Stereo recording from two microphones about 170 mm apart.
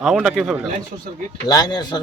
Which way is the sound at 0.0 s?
Centre (ahead or behind).